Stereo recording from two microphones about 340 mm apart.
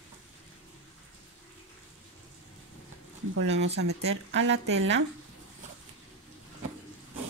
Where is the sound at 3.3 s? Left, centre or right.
Right.